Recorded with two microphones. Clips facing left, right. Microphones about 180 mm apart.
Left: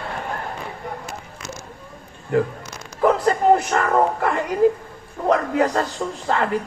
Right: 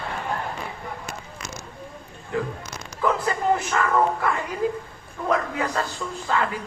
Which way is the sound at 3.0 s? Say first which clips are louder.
Left 6 dB; 50° left (ahead or behind).